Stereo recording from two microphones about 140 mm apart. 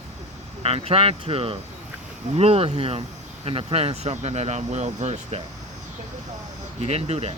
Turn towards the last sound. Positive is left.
turn(degrees=-50)  # may be behind; listen again after turning